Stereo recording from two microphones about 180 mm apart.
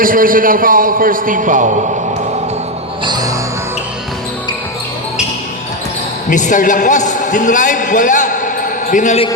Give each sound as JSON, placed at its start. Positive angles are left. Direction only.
{"t": 0.0, "sound": "a man's voice", "side_deg": -50}
{"t": 3.0, "sound": "music", "side_deg": -20}
{"t": 6.3, "sound": "a man's voice", "side_deg": 45}